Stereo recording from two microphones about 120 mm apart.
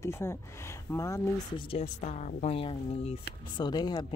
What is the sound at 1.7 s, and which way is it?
Speech, 65° left (ahead or behind).